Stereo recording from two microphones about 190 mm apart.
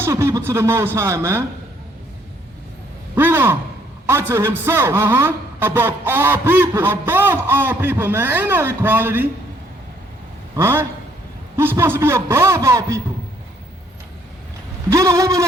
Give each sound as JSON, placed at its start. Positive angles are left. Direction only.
{"t": 0.0, "sound": "a man's voice", "side_deg": -15}
{"t": 3.2, "sound": "a man's voice", "side_deg": -10}
{"t": 10.5, "sound": "a man's voice", "side_deg": -15}
{"t": 14.8, "sound": "a man's voice", "side_deg": -15}